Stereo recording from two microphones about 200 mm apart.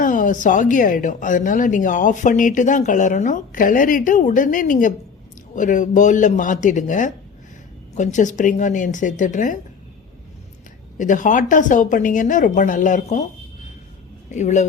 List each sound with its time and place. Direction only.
0.0 s a woman's voice: 40° left (ahead or behind)
10.9 s a woman's voice: 40° left (ahead or behind)
14.3 s a woman's voice: 35° left (ahead or behind)